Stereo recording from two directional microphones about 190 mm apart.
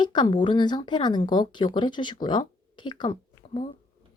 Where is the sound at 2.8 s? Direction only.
25° left (ahead or behind).